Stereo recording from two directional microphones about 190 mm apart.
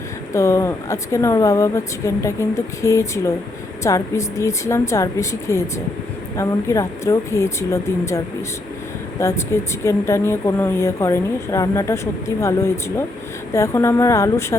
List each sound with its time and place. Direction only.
0.3 s speech: 15° left (ahead or behind)